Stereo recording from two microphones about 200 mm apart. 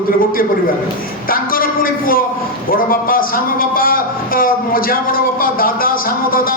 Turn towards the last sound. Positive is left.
turn(degrees=45)  # may be behind; listen again after turning